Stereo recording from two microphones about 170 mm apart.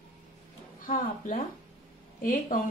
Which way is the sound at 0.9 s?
55° left (ahead or behind).